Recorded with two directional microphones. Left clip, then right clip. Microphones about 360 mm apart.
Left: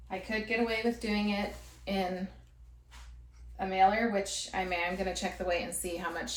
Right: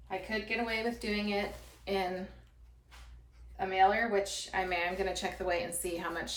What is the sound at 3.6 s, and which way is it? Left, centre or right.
Speech, centre.